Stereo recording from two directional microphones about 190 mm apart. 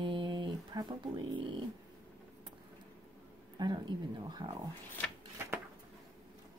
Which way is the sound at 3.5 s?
20° right (ahead or behind).